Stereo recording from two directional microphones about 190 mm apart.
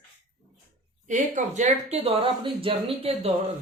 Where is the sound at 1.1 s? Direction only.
40° right (ahead or behind).